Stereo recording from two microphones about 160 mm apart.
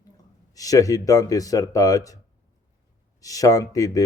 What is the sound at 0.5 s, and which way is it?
A man's voice, 20° left (ahead or behind).